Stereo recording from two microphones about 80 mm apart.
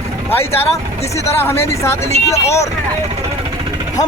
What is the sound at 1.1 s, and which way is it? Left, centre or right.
Speech, left.